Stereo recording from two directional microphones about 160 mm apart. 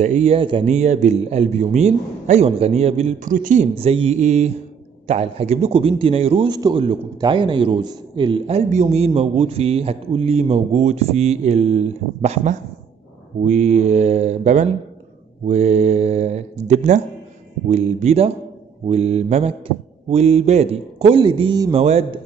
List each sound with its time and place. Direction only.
0.0 s a man's voice: 45° right (ahead or behind)
0.7 s a man's voice: 45° right (ahead or behind)
3.7 s a man's voice: 40° right (ahead or behind)